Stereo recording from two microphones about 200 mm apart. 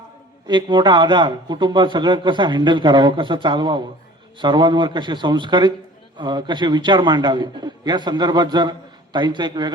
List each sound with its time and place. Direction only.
0.4 s a man's voice: 20° right (ahead or behind)